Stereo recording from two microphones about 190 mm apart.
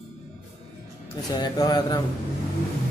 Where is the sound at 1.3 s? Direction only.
20° left (ahead or behind).